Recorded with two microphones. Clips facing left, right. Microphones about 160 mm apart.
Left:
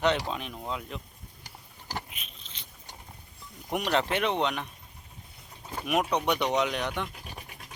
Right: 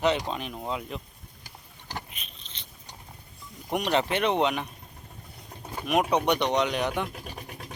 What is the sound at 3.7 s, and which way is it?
Speech, centre (ahead or behind).